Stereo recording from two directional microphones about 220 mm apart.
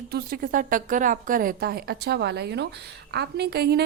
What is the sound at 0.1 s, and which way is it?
A woman's voice, 40° right (ahead or behind).